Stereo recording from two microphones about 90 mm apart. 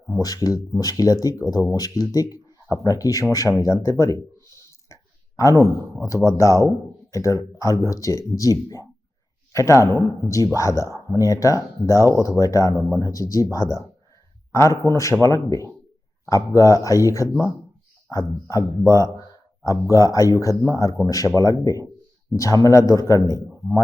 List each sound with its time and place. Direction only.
0.2 s speech: 40° left (ahead or behind)
3.6 s a sound: 35° left (ahead or behind)
5.6 s speech: 35° left (ahead or behind)
19.6 s speech: 40° left (ahead or behind)